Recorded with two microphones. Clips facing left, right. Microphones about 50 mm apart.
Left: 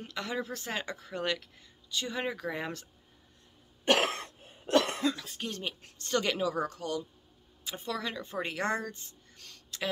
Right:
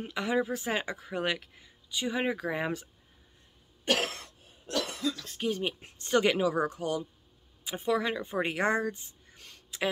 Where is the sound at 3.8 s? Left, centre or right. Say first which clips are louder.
Left 3 dB; left.